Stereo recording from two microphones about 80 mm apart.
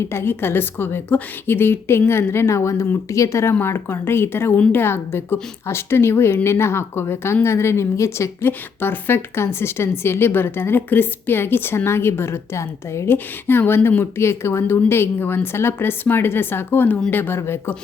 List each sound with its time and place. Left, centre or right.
0.0 s a woman's voice: left